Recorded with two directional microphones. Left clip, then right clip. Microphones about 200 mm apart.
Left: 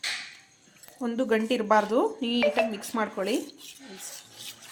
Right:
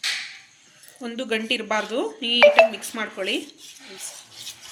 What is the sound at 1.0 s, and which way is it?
Speech, 35° left (ahead or behind).